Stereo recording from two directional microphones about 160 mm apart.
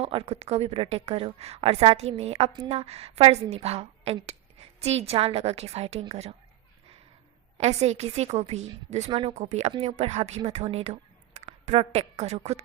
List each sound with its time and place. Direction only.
0.0 s a woman's voice: 35° right (ahead or behind)
7.6 s a woman's voice: 40° right (ahead or behind)